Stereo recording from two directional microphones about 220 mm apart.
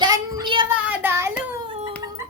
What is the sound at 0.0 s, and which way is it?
Child singing, 20° right (ahead or behind).